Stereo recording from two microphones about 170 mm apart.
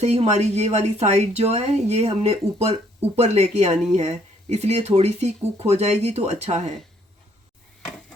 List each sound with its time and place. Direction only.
0.0 s speech: 40° right (ahead or behind)